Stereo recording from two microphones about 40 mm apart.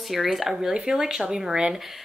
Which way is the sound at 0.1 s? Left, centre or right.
Centre.